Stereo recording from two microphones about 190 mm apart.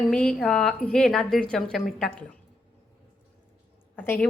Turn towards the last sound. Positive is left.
turn(degrees=10)  # may be behind; listen again after turning